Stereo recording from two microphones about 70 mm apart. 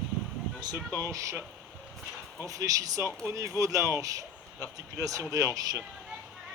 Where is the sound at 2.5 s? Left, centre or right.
Right.